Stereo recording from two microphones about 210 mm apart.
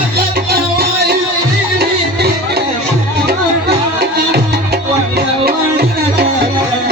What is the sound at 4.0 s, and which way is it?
Music, 50° right (ahead or behind).